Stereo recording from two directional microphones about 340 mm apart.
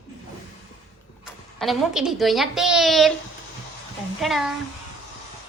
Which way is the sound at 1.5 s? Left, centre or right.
Centre.